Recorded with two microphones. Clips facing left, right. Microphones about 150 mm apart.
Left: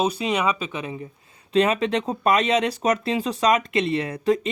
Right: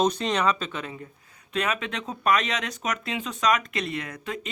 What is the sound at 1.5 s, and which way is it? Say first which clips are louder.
Speech: left 9 dB; 30° left (ahead or behind).